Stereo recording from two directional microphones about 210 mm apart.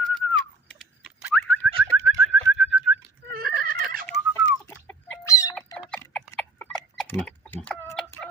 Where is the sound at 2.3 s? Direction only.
Centre (ahead or behind).